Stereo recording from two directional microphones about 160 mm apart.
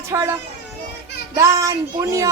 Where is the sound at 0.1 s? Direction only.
15° right (ahead or behind).